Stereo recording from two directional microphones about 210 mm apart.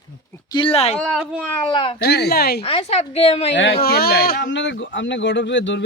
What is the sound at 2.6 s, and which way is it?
Speech, 25° left (ahead or behind).